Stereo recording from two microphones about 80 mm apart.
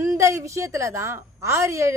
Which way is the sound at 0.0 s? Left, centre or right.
Right.